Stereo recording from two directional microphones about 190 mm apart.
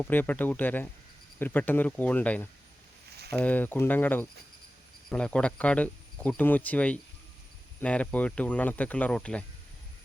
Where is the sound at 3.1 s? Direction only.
55° right (ahead or behind).